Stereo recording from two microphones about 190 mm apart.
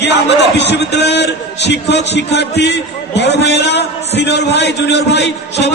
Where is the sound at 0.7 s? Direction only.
65° left (ahead or behind).